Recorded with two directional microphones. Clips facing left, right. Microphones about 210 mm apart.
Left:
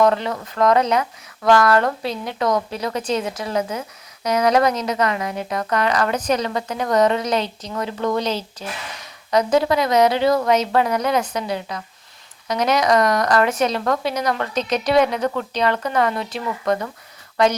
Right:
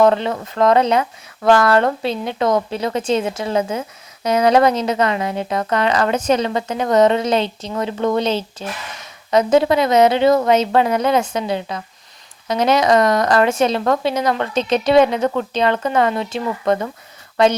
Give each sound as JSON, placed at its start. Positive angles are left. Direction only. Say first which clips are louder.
{"t": 0.0, "sound": "speech", "louder": "right 3 dB", "side_deg": -25}